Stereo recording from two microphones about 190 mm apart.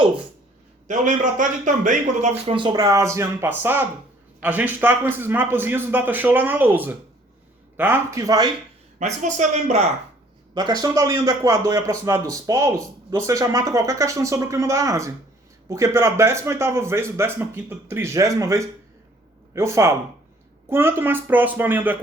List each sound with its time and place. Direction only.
0.9 s a man's voice: 40° right (ahead or behind); by 8.5 s 20° right (ahead or behind)
9.0 s a man's voice: 40° right (ahead or behind)
10.5 s a man's voice: 20° right (ahead or behind)